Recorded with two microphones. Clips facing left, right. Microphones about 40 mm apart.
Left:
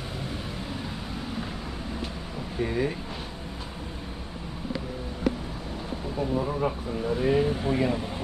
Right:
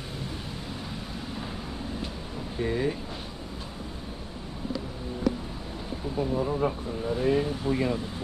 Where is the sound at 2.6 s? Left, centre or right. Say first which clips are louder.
Left 1 dB; centre.